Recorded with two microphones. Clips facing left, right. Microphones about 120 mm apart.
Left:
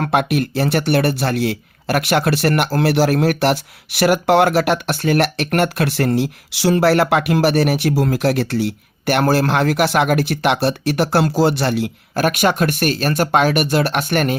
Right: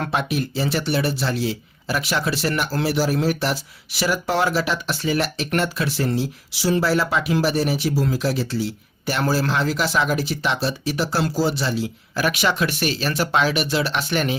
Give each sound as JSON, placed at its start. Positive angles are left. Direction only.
{"t": 0.0, "sound": "speech", "side_deg": 60}